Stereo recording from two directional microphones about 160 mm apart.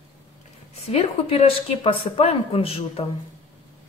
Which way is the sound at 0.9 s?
40° left (ahead or behind).